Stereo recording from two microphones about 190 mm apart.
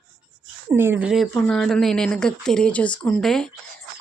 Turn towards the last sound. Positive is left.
turn(degrees=5)  # may be behind; listen again after turning